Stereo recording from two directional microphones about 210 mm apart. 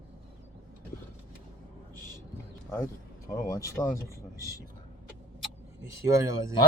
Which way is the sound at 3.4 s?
15° left (ahead or behind).